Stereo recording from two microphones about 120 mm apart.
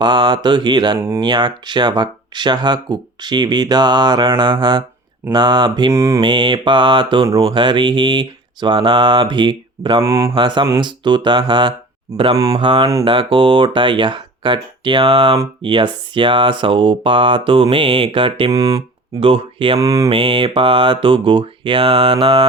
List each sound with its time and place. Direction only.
0.0 s speech: 40° right (ahead or behind)
0.9 s mantra: 20° right (ahead or behind)
1.2 s speech: 40° right (ahead or behind)
5.9 s mantra: 25° right (ahead or behind)
6.1 s speech: 40° right (ahead or behind)
10.0 s mantra: 25° right (ahead or behind)
10.3 s speech: 40° right (ahead or behind)
18.5 s mantra: 30° right (ahead or behind)
19.2 s speech: 50° right (ahead or behind)
19.8 s mantra: 30° right (ahead or behind)
20.1 s speech: 50° right (ahead or behind)